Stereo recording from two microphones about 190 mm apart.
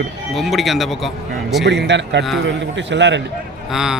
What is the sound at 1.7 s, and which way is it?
A man's voice, 65° right (ahead or behind).